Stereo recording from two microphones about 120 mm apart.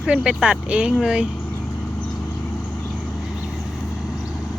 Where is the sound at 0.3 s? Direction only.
5° right (ahead or behind).